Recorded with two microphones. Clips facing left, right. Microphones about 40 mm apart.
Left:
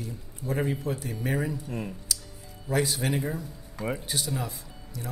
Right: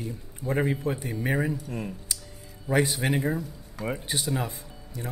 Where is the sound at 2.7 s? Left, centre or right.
Centre.